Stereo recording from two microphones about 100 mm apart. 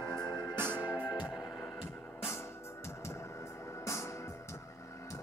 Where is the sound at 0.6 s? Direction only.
20° right (ahead or behind).